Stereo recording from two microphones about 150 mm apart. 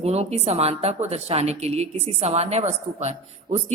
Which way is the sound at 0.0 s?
45° right (ahead or behind).